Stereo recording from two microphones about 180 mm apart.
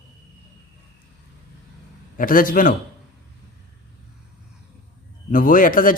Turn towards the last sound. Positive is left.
turn(degrees=50)  # may be behind; listen again after turning